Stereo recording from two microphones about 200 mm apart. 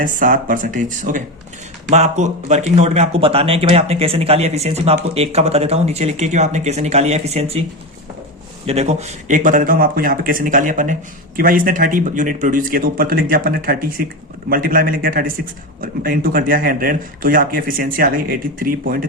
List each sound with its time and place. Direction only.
0.0 s speech: 40° right (ahead or behind)
8.6 s speech: 30° right (ahead or behind)